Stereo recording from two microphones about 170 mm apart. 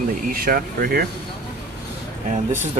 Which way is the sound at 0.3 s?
60° right (ahead or behind).